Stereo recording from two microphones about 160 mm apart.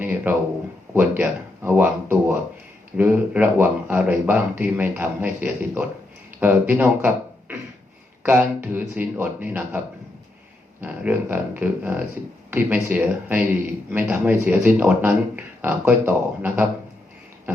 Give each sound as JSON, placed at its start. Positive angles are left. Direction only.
{"t": 0.0, "sound": "speech", "side_deg": -10}